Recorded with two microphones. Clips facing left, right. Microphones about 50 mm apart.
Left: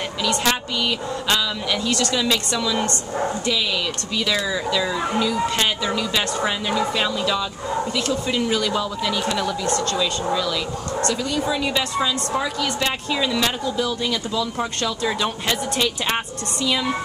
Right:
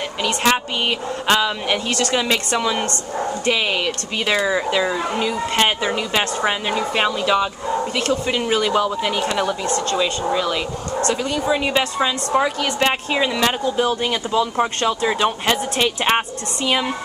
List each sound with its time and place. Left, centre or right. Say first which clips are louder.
0.2 s a woman's voice: right 3 dB; right